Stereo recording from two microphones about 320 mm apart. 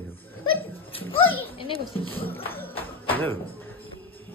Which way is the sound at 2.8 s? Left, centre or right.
Centre.